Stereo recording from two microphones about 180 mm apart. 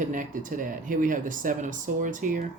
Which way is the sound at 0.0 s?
45° right (ahead or behind).